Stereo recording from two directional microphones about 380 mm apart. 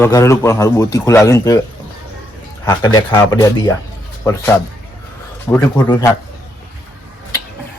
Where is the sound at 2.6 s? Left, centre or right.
Centre.